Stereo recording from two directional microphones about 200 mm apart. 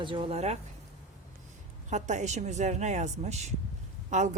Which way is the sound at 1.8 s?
35° right (ahead or behind).